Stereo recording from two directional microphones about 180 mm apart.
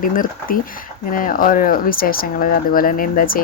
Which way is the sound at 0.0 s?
50° left (ahead or behind).